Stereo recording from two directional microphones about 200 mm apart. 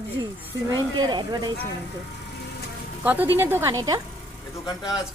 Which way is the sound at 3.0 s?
10° right (ahead or behind).